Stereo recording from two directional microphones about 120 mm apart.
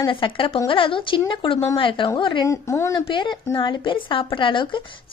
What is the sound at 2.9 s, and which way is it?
A woman's voice, 40° left (ahead or behind).